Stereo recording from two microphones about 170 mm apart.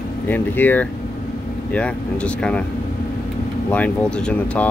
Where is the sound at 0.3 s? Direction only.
10° left (ahead or behind).